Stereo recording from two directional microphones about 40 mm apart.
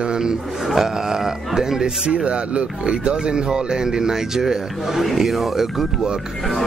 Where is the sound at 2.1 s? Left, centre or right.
Right; by 5.0 s centre.